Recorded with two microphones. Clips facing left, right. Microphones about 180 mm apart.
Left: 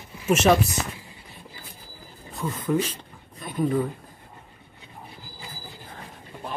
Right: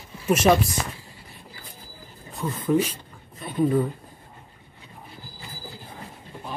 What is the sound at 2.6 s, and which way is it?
Speech, 10° right (ahead or behind).